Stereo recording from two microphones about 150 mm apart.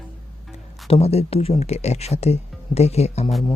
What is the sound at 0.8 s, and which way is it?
Speech, 40° left (ahead or behind).